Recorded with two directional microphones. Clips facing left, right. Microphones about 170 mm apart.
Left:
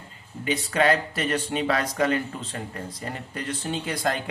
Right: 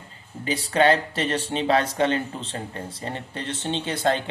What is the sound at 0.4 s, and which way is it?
Speech, 30° right (ahead or behind).